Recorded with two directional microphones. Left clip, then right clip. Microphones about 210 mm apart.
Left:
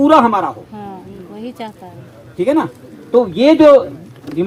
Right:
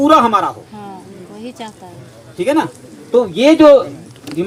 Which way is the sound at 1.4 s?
25° left (ahead or behind).